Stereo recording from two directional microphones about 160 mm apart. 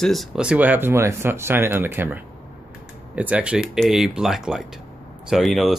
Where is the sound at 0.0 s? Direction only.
Centre (ahead or behind).